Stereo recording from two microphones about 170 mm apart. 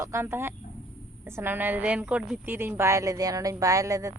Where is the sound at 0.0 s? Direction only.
15° right (ahead or behind).